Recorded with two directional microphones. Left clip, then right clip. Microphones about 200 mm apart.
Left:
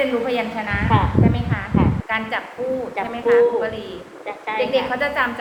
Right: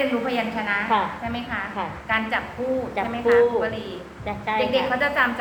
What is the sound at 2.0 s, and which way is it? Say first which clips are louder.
A woman's voice: even; 20° left (ahead or behind).